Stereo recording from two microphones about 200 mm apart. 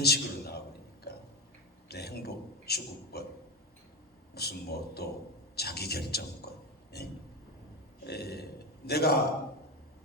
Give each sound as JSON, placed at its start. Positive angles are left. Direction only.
{"t": 0.0, "sound": "a sound", "side_deg": 55}
{"t": 1.9, "sound": "a man's voice", "side_deg": 55}
{"t": 4.4, "sound": "a man's voice", "side_deg": 55}